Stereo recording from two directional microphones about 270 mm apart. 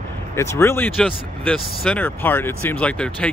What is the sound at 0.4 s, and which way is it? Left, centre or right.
Speech, centre.